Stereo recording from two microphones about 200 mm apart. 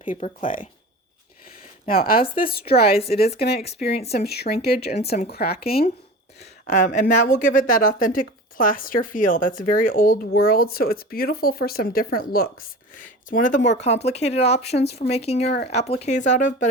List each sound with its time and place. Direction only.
0.0 s speech: 40° left (ahead or behind)
1.9 s speech: 45° left (ahead or behind)
2.8 s speech: 30° left (ahead or behind)
3.3 s speech: 50° left (ahead or behind)
3.9 s speech: 30° left (ahead or behind)
4.3 s speech: 50° left (ahead or behind)
6.4 s speech: 35° left (ahead or behind)
15.4 s speech: 55° left (ahead or behind)
15.7 s speech: 30° left (ahead or behind)